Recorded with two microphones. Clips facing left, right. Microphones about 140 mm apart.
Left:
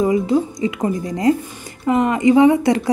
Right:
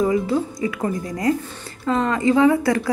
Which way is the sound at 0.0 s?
20° left (ahead or behind).